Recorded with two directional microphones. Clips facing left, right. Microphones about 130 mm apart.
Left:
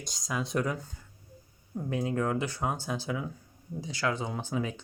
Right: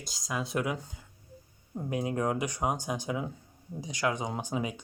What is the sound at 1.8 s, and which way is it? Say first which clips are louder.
Speech: left 1 dB; 15° right (ahead or behind).